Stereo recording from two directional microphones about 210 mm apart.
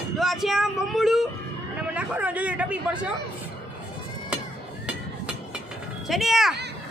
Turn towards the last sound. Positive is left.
turn(degrees=0)  # may be behind; listen again after turning